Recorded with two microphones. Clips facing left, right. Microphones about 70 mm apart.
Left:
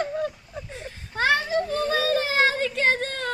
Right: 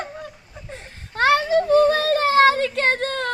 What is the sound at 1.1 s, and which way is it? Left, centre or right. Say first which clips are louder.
Child singing: right 5 dB; right.